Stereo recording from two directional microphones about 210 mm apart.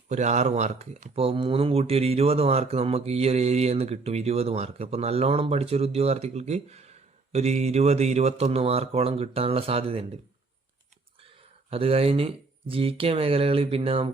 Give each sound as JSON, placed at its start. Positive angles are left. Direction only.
{"t": 0.1, "sound": "speech", "side_deg": -35}
{"t": 11.7, "sound": "speech", "side_deg": -30}